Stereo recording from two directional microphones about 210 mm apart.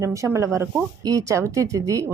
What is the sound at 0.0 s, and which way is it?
Speech, 15° right (ahead or behind).